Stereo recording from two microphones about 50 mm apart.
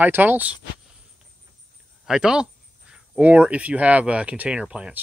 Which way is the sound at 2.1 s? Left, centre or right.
Centre.